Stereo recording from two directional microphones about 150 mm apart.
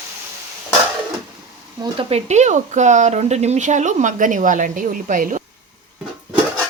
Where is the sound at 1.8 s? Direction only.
40° right (ahead or behind); by 5.4 s 60° right (ahead or behind).